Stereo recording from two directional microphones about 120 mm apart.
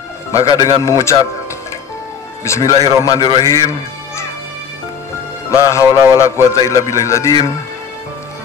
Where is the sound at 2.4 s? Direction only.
25° left (ahead or behind).